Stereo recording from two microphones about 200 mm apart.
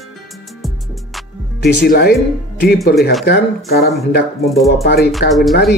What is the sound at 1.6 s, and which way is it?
Speech, 55° left (ahead or behind).